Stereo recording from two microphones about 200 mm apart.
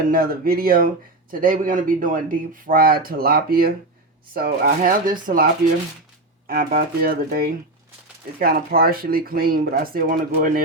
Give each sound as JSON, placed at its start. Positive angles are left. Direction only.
{"t": 0.1, "sound": "speech", "side_deg": -45}
{"t": 6.5, "sound": "speech", "side_deg": -45}